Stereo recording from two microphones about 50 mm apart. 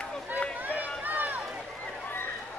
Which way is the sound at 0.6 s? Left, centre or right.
Right.